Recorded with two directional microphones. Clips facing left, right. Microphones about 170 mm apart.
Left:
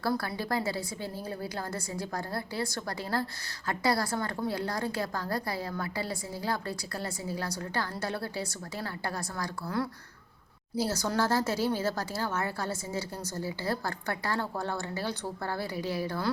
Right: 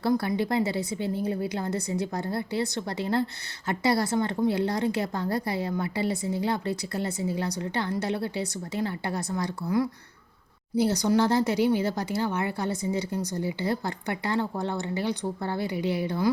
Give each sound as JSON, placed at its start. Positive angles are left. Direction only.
{"t": 0.0, "sound": "a woman's voice", "side_deg": -20}